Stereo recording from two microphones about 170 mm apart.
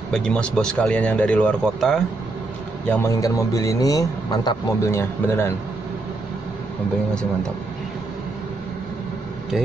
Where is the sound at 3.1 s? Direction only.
20° left (ahead or behind).